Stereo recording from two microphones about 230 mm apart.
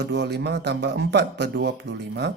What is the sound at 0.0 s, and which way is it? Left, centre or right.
A man's voice, right.